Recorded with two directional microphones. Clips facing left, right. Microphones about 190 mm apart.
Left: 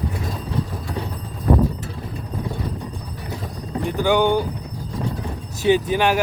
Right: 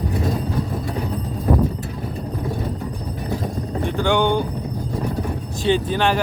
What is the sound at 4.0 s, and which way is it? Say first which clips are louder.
Speech: left 1 dB; 5° left (ahead or behind).